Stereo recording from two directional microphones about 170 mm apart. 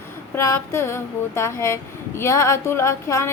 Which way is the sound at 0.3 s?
15° left (ahead or behind).